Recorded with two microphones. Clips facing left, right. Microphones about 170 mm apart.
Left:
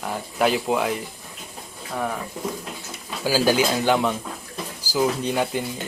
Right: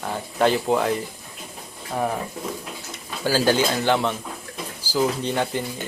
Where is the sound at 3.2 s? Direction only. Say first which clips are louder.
Even; 10° left (ahead or behind).